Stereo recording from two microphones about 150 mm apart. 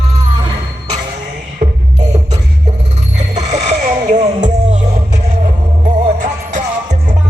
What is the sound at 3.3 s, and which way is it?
Music, 50° right (ahead or behind).